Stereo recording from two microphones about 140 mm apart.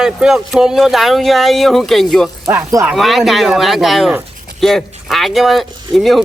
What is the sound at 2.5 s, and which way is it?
Speech, 15° right (ahead or behind).